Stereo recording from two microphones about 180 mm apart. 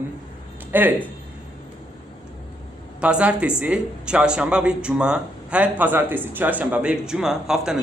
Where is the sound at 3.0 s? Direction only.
5° right (ahead or behind).